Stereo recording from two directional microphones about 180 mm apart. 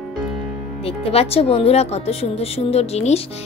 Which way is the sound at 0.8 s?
35° left (ahead or behind).